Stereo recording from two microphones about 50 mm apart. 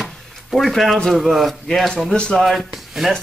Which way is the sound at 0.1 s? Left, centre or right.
Centre.